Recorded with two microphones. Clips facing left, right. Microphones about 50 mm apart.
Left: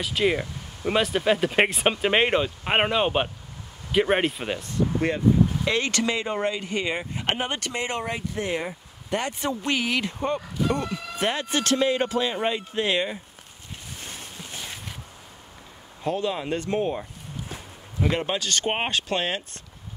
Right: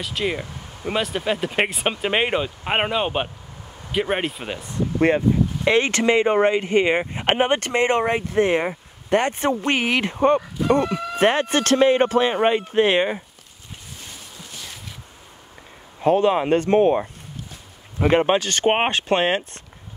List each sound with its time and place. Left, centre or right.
0.0 s speech: centre
5.0 s speech: right
16.0 s speech: right
18.0 s speech: right